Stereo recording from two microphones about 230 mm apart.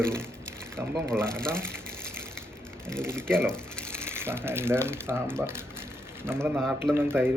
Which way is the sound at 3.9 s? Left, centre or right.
Centre.